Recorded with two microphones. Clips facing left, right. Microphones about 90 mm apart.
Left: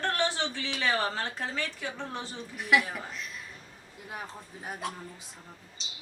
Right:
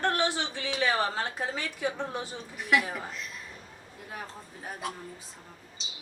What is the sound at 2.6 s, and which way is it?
Speech, centre (ahead or behind).